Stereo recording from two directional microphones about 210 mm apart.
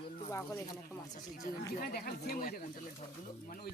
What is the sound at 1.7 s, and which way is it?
Speech, 45° left (ahead or behind).